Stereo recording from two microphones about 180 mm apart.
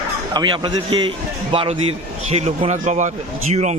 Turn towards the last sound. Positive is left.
turn(degrees=-40)  # may be behind; listen again after turning